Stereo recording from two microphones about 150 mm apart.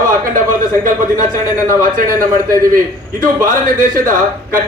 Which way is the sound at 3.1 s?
60° right (ahead or behind).